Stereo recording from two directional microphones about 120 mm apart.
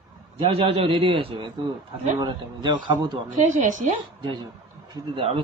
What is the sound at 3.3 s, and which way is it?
Speech, 90° right.